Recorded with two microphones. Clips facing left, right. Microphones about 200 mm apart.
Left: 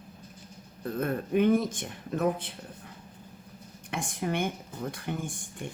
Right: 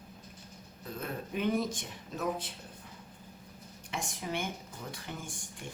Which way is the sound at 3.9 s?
55° left (ahead or behind).